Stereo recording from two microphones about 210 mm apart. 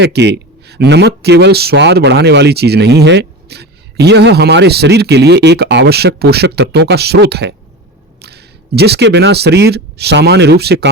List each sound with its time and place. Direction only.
0.0 s speech: 55° right (ahead or behind)